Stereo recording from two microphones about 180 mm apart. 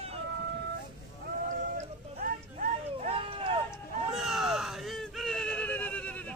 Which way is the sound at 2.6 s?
35° right (ahead or behind).